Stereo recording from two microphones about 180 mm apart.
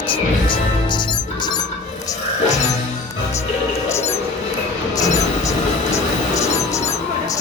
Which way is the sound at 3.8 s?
15° left (ahead or behind).